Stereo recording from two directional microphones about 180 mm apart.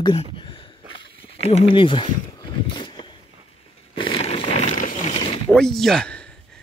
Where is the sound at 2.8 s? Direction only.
25° left (ahead or behind).